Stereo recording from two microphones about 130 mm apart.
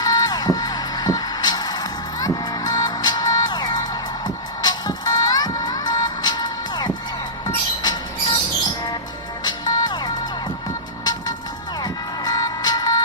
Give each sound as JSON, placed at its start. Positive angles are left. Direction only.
{"t": 0.0, "sound": "music", "side_deg": 30}
{"t": 9.4, "sound": "music", "side_deg": 30}
{"t": 11.0, "sound": "vehicle", "side_deg": 30}
{"t": 11.8, "sound": "music", "side_deg": 30}